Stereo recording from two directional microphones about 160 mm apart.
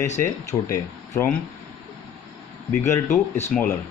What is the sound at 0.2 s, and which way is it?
Speech, 20° left (ahead or behind).